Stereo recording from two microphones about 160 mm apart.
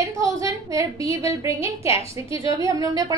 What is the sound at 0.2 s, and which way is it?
A woman's voice, 20° right (ahead or behind).